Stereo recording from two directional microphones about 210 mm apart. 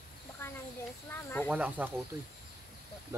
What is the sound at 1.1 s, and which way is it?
Speech, 10° left (ahead or behind).